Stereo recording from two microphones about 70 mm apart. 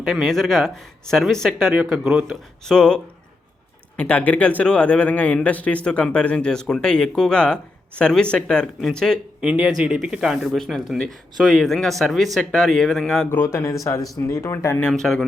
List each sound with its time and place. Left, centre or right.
0.0 s a man's voice: centre
3.9 s a man's voice: left
9.4 s speech: centre
13.3 s speech: left
14.8 s a man's voice: centre